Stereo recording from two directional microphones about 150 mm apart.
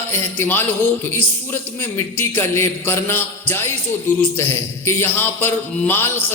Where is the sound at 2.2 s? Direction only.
15° left (ahead or behind).